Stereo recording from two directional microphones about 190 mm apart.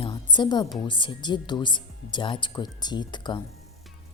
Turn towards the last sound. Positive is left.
turn(degrees=25)  # may be behind; listen again after turning